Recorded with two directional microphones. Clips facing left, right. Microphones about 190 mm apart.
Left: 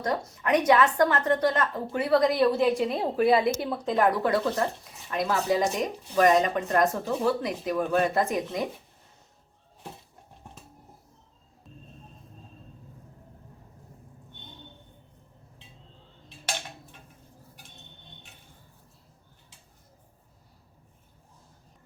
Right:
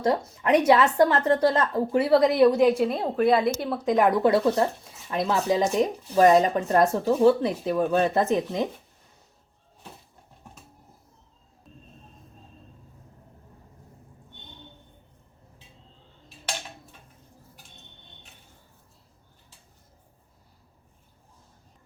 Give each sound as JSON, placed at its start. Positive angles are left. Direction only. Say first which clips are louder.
{"t": 0.0, "sound": "a woman's voice", "louder": "right 5 dB", "side_deg": -25}
{"t": 2.6, "sound": "a woman's voice", "louder": "right 3 dB", "side_deg": -5}
{"t": 3.8, "sound": "speech", "louder": "right 4 dB", "side_deg": -15}
{"t": 4.3, "sound": "a woman's voice", "louder": "right 4 dB", "side_deg": -30}